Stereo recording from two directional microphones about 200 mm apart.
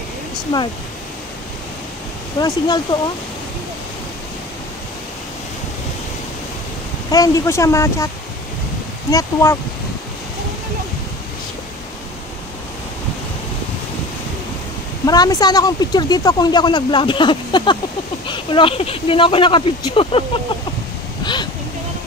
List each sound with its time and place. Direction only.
2.3 s speech: 20° left (ahead or behind)
7.1 s speech: 15° left (ahead or behind)
9.1 s speech: 15° left (ahead or behind)
15.0 s speech: 20° left (ahead or behind)
21.2 s vehicle: 20° left (ahead or behind)